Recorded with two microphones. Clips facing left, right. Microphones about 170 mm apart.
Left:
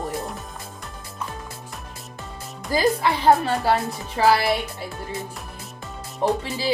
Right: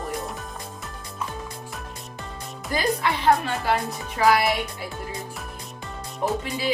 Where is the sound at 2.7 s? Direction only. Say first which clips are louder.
Left 4 dB; 35° left (ahead or behind).